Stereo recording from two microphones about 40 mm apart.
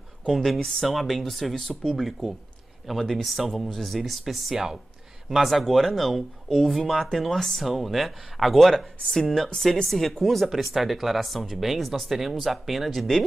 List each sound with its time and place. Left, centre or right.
0.3 s speech: centre
1.6 s speech: centre
1.9 s speech: centre
9.0 s speech: centre